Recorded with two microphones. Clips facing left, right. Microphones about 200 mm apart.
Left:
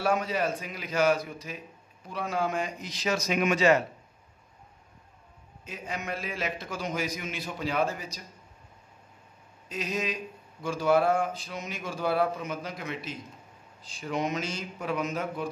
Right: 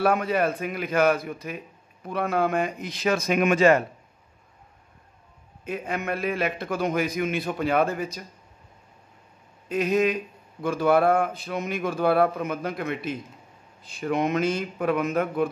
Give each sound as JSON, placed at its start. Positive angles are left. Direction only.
{"t": 0.0, "sound": "speech", "side_deg": -60}
{"t": 5.7, "sound": "speech", "side_deg": -60}
{"t": 9.7, "sound": "speech", "side_deg": -60}